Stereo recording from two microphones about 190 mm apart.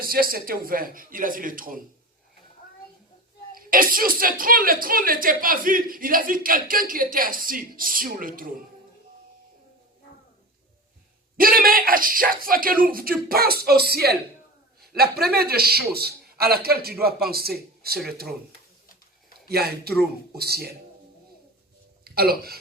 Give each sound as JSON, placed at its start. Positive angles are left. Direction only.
{"t": 0.0, "sound": "speech", "side_deg": -50}
{"t": 3.5, "sound": "speech", "side_deg": -50}
{"t": 11.3, "sound": "a man's voice", "side_deg": -50}
{"t": 19.5, "sound": "a man's voice", "side_deg": -55}
{"t": 22.0, "sound": "speech", "side_deg": -55}